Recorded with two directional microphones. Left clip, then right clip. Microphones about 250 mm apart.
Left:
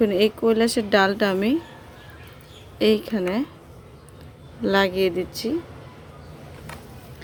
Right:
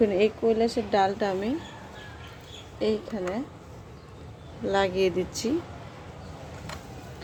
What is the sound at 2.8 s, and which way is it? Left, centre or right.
Speech, left.